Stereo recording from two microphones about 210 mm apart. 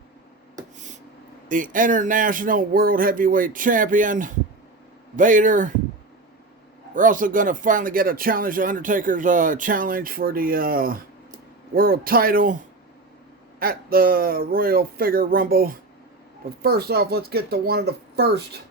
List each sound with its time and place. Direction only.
1.5 s speech: 40° right (ahead or behind)
6.9 s speech: 40° right (ahead or behind)
13.6 s speech: 45° right (ahead or behind)